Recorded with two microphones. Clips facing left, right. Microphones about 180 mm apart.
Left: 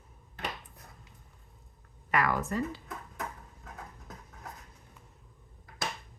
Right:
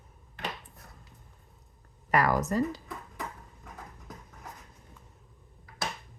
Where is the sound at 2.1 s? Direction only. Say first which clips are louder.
Right 4 dB; 40° right (ahead or behind).